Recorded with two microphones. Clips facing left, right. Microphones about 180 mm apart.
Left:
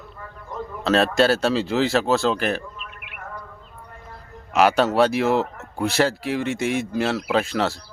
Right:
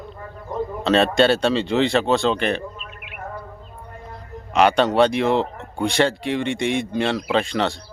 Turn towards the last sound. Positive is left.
turn(degrees=5)  # may be behind; listen again after turning